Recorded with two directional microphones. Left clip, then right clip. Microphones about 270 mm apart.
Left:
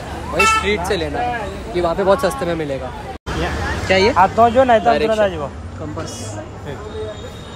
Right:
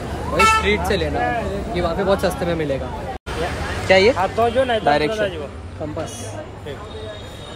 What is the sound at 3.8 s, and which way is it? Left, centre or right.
Speech, centre.